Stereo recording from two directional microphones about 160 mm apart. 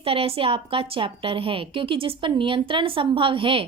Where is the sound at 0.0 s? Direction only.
35° right (ahead or behind).